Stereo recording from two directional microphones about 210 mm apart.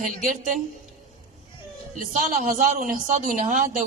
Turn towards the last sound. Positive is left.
turn(degrees=-40)  # may be behind; listen again after turning